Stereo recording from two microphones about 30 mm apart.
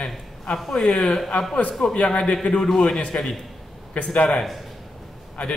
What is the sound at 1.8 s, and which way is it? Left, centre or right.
Speech, left.